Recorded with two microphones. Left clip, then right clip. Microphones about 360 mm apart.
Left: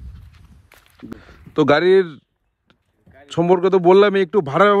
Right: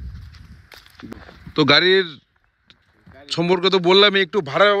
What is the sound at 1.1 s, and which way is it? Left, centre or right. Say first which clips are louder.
Speech: left 1 dB; centre.